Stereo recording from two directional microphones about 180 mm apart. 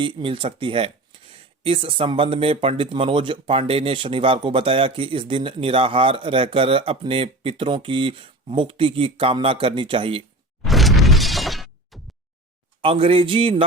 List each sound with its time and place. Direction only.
0.0 s speech: 30° right (ahead or behind)
10.6 s shatter: centre (ahead or behind)
12.8 s a sound: 30° right (ahead or behind)